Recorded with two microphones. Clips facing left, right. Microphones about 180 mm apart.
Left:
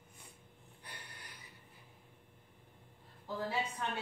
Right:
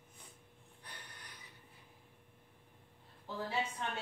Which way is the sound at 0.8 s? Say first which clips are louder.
Left 1 dB; 10° left (ahead or behind).